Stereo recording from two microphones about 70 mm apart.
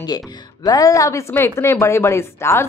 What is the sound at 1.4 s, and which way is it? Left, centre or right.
Speech, left.